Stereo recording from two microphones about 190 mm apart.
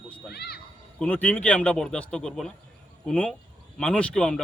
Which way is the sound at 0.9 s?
5° left (ahead or behind).